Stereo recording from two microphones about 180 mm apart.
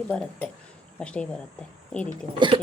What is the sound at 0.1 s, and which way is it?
Speech, 5° left (ahead or behind).